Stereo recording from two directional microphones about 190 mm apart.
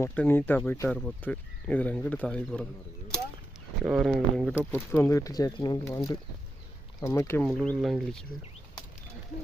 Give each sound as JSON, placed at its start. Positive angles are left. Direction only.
{"t": 0.0, "sound": "speech", "side_deg": 10}
{"t": 3.8, "sound": "speech", "side_deg": 0}
{"t": 4.5, "sound": "speech", "side_deg": 10}
{"t": 7.4, "sound": "speech", "side_deg": 5}